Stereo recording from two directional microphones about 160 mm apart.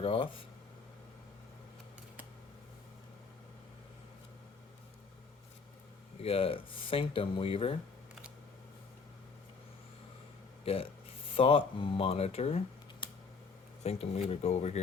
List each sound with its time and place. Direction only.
0.0 s speech: 35° left (ahead or behind)
6.2 s speech: 35° left (ahead or behind)
11.3 s speech: 35° left (ahead or behind)